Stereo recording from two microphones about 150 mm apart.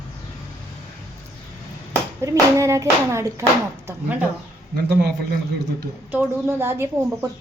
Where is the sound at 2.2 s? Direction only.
20° right (ahead or behind).